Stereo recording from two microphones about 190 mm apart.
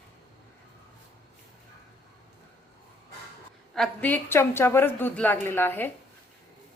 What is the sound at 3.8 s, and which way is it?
A woman's voice, 10° left (ahead or behind).